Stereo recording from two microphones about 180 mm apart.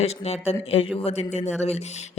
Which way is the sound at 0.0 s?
35° left (ahead or behind).